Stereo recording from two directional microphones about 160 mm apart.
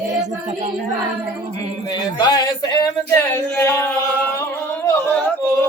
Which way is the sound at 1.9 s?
25° left (ahead or behind).